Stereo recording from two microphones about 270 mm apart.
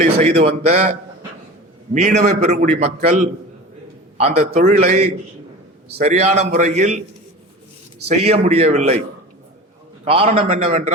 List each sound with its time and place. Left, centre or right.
0.0 s a man's voice: right
8.0 s a man's voice: right
10.0 s a man's voice: right